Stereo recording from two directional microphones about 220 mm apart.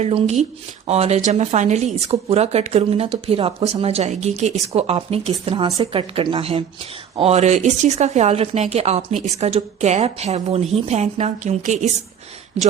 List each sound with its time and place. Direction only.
0.0 s speech: 30° right (ahead or behind)